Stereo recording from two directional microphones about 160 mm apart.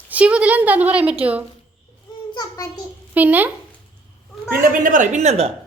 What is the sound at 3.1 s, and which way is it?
Speech, 10° right (ahead or behind).